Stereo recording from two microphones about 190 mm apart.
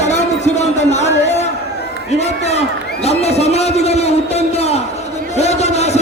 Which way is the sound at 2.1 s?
35° left (ahead or behind).